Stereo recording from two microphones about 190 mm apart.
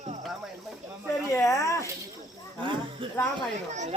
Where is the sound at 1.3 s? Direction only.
15° left (ahead or behind).